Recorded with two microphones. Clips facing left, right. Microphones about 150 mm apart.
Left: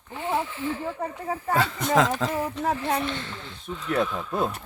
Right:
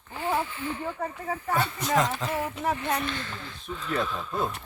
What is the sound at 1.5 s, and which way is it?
Speech, 90° left.